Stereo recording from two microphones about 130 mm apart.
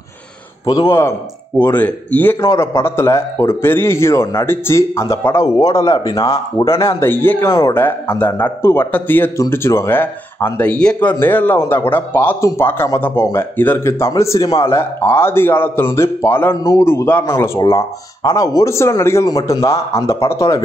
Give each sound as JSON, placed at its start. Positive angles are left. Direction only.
{"t": 0.7, "sound": "a man's voice", "side_deg": 25}